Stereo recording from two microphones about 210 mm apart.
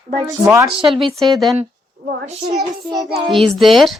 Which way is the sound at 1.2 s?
Centre (ahead or behind).